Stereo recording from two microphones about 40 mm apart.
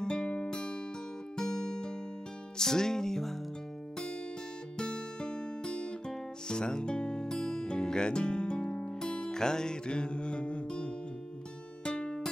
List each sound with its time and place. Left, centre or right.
0.0 s music: left
4.7 s music: left